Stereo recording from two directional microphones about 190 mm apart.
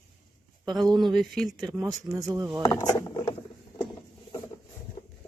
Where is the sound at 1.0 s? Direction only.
Centre (ahead or behind).